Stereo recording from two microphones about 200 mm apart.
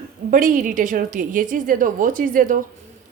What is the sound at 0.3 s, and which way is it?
Speech, 45° right (ahead or behind).